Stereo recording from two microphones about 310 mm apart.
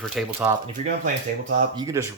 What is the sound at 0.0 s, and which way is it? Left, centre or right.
Speech, centre.